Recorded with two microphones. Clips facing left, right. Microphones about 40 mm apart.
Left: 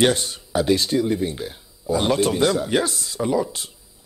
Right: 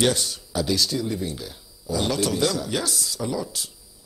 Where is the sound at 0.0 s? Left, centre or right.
Left.